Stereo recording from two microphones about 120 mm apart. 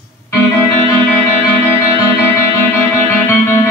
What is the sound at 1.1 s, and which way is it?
Music, 20° left (ahead or behind).